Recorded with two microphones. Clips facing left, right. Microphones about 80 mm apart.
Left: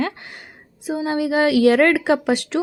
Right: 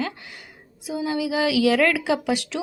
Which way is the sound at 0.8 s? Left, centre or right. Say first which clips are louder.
Left 4 dB; left.